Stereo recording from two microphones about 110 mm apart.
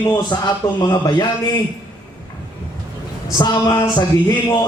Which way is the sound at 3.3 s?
35° left (ahead or behind).